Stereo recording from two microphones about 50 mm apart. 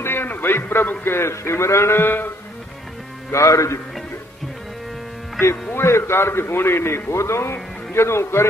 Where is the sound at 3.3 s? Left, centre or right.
Left.